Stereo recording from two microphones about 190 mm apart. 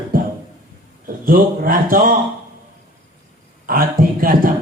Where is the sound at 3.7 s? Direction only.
50° right (ahead or behind).